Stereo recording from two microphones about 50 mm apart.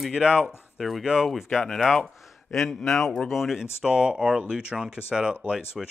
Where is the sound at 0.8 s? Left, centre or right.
Centre.